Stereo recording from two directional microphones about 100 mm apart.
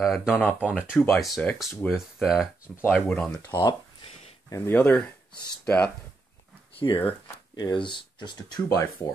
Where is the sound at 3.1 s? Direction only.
15° left (ahead or behind).